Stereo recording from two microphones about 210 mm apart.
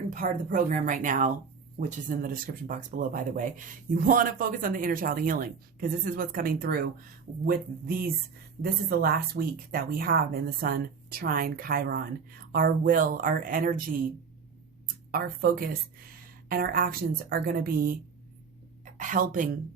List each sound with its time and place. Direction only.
0.1 s speech: 40° right (ahead or behind)
15.1 s speech: 45° right (ahead or behind)
18.9 s speech: 40° right (ahead or behind)